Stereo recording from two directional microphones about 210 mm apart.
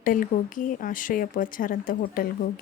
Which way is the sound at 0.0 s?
40° left (ahead or behind).